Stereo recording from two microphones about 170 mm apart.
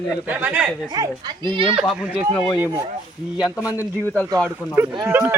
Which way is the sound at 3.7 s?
10° left (ahead or behind).